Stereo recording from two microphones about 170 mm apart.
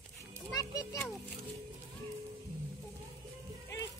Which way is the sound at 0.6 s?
20° left (ahead or behind).